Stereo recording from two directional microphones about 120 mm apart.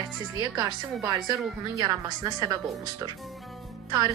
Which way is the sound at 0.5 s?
30° right (ahead or behind).